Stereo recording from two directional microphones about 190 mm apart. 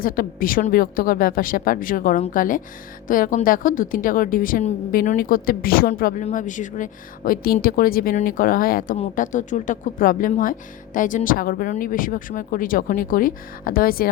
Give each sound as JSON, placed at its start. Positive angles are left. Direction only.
{"t": 0.0, "sound": "speech", "side_deg": 45}